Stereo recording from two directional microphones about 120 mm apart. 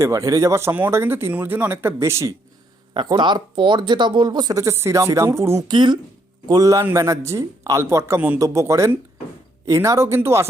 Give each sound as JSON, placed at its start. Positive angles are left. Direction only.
{"t": 0.0, "sound": "speech", "side_deg": -25}
{"t": 2.9, "sound": "speech", "side_deg": -40}
{"t": 5.7, "sound": "speech", "side_deg": -40}
{"t": 6.5, "sound": "speech", "side_deg": -30}